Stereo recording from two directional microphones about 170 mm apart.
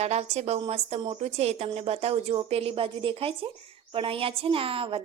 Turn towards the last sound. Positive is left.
turn(degrees=-30)  # may be behind; listen again after turning